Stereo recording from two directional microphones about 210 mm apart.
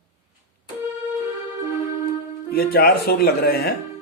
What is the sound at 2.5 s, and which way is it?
A man's voice, 45° left (ahead or behind).